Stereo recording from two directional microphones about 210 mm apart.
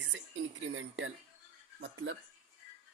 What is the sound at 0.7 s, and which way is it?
Speech, 65° right (ahead or behind).